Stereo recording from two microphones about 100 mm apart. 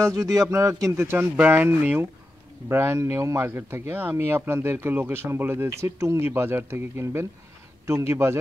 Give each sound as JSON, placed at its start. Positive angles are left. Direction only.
{"t": 0.1, "sound": "speech", "side_deg": -35}